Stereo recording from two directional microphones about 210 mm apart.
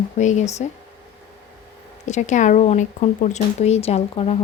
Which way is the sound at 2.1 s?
35° left (ahead or behind).